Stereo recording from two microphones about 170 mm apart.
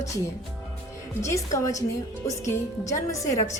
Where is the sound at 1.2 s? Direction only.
15° left (ahead or behind).